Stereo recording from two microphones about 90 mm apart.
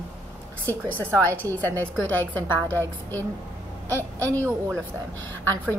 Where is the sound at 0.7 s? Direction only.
20° left (ahead or behind).